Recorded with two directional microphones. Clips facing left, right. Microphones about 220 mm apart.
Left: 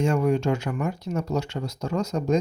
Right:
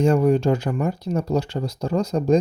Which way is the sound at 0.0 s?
35° right (ahead or behind).